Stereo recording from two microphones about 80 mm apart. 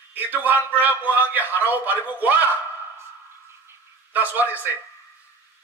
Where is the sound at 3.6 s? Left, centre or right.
Right.